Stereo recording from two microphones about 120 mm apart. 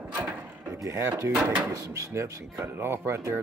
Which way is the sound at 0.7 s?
25° right (ahead or behind).